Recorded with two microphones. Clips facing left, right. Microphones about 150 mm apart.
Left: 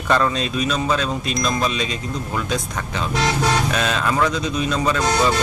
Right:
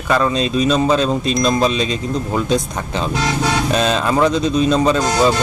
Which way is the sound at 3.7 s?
25° right (ahead or behind).